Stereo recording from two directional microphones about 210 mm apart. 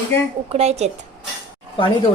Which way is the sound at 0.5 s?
30° right (ahead or behind).